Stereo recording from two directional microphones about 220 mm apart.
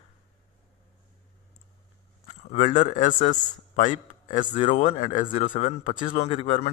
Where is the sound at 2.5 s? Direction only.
35° left (ahead or behind).